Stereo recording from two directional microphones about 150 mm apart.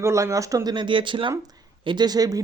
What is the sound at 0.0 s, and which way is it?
Speech, 20° right (ahead or behind).